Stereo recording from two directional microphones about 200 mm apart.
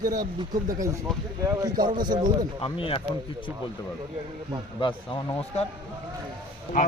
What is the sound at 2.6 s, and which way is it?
Speech, 25° left (ahead or behind).